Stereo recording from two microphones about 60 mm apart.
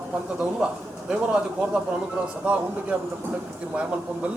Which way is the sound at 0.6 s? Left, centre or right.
Centre.